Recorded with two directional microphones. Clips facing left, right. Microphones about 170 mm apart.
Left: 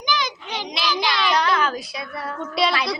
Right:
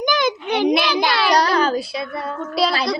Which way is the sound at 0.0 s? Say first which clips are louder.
Right 7 dB; 50° right (ahead or behind).